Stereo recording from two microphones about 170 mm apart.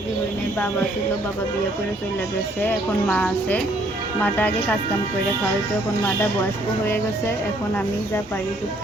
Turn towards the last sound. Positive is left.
turn(degrees=15)  # may be behind; listen again after turning